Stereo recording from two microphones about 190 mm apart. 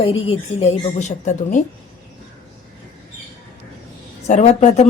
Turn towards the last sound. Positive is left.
turn(degrees=35)  # may be behind; listen again after turning